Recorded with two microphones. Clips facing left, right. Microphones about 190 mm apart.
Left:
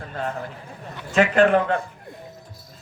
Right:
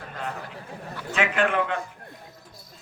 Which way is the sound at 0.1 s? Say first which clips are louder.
Left 5 dB; 40° left (ahead or behind).